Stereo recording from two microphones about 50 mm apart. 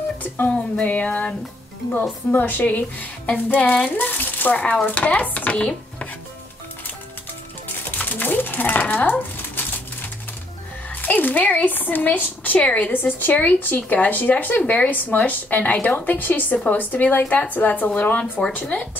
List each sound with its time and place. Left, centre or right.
0.2 s a sound: left
0.8 s dishes: left
2.3 s a woman's voice: left
4.9 s dishes: left
7.6 s music: left
9.6 s pigeon: left
10.9 s speech: left
11.7 s a woman's voice: left
12.6 s dishes: left
12.9 s a woman's voice: left